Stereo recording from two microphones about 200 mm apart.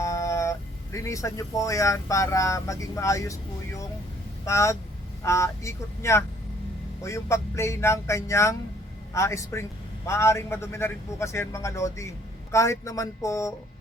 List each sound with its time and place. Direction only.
0.0 s a sound: 15° left (ahead or behind)
0.9 s a man's voice: 15° left (ahead or behind)
4.4 s a man's voice: 15° left (ahead or behind)